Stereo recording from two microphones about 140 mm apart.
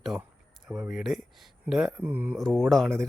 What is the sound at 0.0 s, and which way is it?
Speech, centre (ahead or behind).